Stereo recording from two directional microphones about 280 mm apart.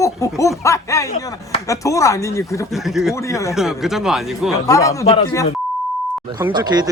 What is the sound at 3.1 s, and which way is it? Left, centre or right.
Speech, centre.